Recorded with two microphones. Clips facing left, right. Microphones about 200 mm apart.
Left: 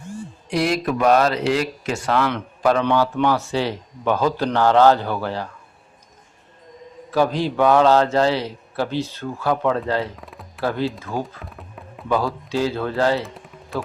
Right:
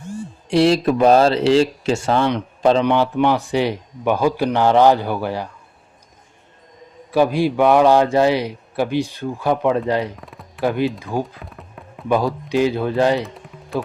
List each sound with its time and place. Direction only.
0.5 s speech: 30° right (ahead or behind); by 5.5 s 15° right (ahead or behind)
7.1 s speech: 10° right (ahead or behind)
10.2 s speech: centre (ahead or behind)
10.6 s speech: 15° right (ahead or behind)
11.4 s music: centre (ahead or behind)
12.0 s speech: 15° right (ahead or behind)
13.2 s music: centre (ahead or behind)